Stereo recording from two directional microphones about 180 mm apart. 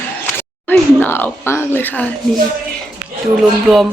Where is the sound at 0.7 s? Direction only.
10° left (ahead or behind).